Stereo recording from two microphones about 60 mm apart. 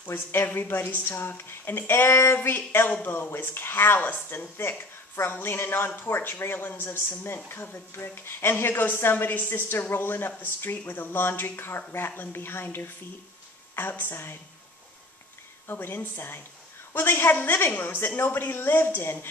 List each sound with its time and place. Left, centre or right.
0.0 s speech: left
15.6 s speech: left